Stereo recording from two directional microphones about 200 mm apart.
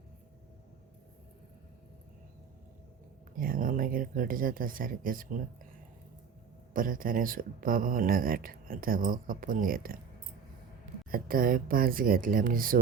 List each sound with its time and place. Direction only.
3.3 s speech: 45° right (ahead or behind)
6.7 s speech: 45° right (ahead or behind)
11.1 s speech: 45° right (ahead or behind)